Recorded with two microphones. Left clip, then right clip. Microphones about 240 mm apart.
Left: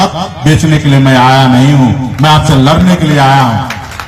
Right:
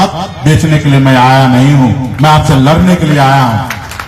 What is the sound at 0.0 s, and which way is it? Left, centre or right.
A man's voice, left.